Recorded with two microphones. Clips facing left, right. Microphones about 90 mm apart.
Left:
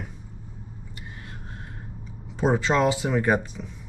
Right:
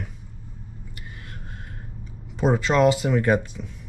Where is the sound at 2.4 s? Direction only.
5° left (ahead or behind).